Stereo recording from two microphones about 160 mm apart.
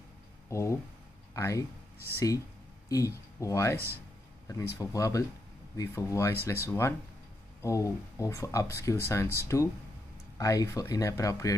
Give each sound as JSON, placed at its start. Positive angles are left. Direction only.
{"t": 0.5, "sound": "speech", "side_deg": 20}